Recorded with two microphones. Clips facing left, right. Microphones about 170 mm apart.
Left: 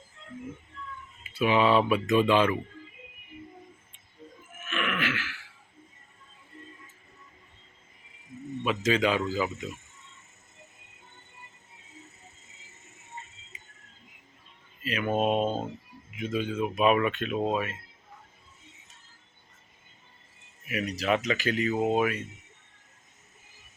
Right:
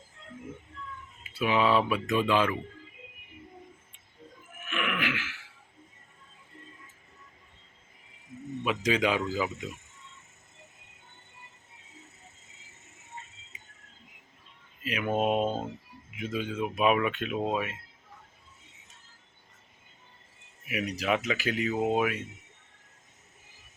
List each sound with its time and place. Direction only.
1.3 s speech: centre (ahead or behind)
4.6 s throat clearing: 15° right (ahead or behind)
8.6 s speech: 10° right (ahead or behind)
14.8 s speech: 10° right (ahead or behind)
20.7 s speech: 10° right (ahead or behind)